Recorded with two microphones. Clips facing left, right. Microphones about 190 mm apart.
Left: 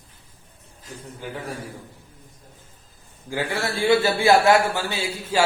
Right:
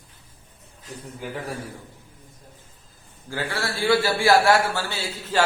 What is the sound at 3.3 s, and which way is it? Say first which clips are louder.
A man's voice: left 3 dB; 15° left (ahead or behind).